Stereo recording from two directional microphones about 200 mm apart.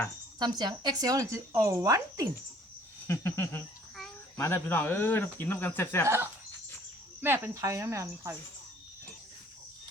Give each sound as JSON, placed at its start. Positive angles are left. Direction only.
{"t": 0.3, "sound": "speech", "side_deg": -20}
{"t": 3.1, "sound": "speech", "side_deg": 15}
{"t": 7.2, "sound": "speech", "side_deg": -10}